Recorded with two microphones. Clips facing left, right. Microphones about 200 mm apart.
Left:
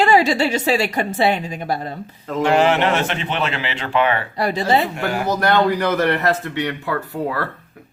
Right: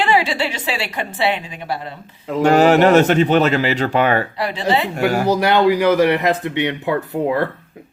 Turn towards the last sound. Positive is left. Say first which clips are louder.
# right 4 dB
turn(degrees=-20)  # may be behind; listen again after turning